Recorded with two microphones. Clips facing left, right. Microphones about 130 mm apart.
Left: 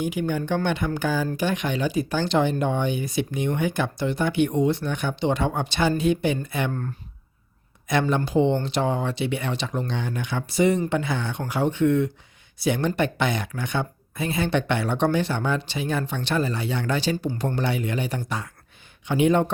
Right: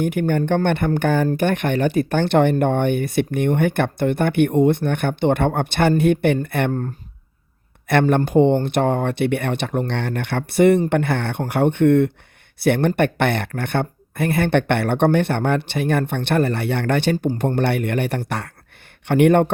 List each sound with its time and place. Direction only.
0.0 s speech: 60° right (ahead or behind)
6.7 s speech: 35° right (ahead or behind)
7.9 s speech: 60° right (ahead or behind)